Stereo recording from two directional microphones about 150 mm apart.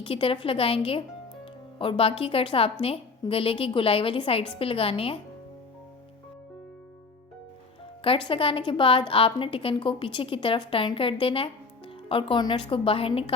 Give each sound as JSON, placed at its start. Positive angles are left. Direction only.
{"t": 0.0, "sound": "a woman's voice", "side_deg": 35}
{"t": 8.0, "sound": "a woman's voice", "side_deg": 35}